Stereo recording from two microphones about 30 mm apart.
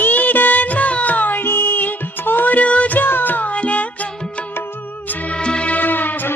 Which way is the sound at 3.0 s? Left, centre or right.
Left.